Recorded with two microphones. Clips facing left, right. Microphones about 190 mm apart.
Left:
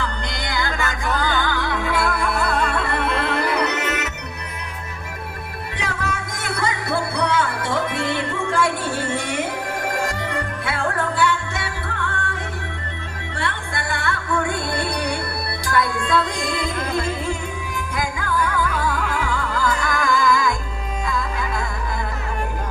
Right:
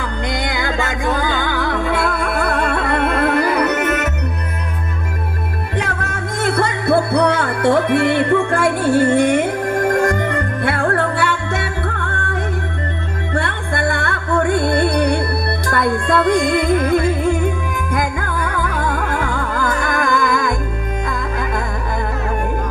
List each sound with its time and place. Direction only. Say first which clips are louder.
0.0 s music: right 6 dB; 55° right (ahead or behind)
0.7 s music: right 5 dB; 20° right (ahead or behind)
1.5 s music: right 4 dB; 55° right (ahead or behind)
5.7 s music: right 3 dB; 55° right (ahead or behind)
13.3 s music: right 6 dB; 55° right (ahead or behind)
18.8 s music: right 3 dB; 50° right (ahead or behind)